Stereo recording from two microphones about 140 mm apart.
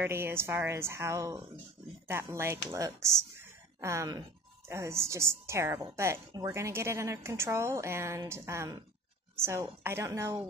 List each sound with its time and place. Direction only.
0.0 s a woman's voice: 15° right (ahead or behind)